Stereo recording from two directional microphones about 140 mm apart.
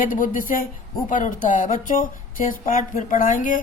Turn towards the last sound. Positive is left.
turn(degrees=70)  # may be behind; listen again after turning